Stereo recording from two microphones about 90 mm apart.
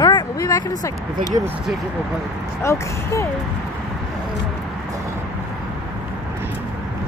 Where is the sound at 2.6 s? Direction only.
35° left (ahead or behind).